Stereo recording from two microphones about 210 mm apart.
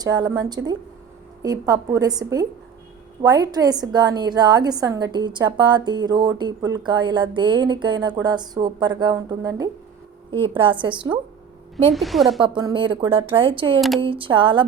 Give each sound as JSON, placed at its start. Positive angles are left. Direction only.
{"t": 0.0, "sound": "a woman's voice", "side_deg": -20}
{"t": 11.9, "sound": "a woman's voice", "side_deg": 0}
{"t": 12.4, "sound": "a woman's voice", "side_deg": -25}